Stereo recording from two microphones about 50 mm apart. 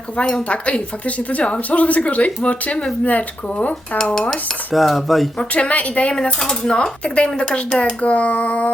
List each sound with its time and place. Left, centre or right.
0.4 s a woman's voice: left
3.9 s speech: centre
4.7 s dishes: centre
5.4 s a woman's voice: left